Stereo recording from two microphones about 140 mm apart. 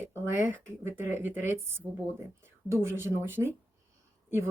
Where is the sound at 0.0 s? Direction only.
15° right (ahead or behind).